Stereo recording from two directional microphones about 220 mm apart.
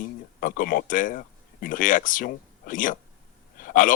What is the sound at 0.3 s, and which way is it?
Speech, 40° left (ahead or behind).